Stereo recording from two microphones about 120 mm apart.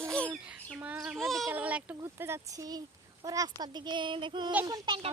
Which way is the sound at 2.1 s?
20° right (ahead or behind).